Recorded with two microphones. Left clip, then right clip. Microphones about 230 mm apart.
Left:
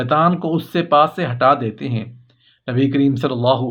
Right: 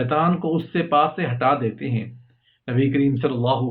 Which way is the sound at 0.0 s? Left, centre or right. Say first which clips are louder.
Left 5 dB; left.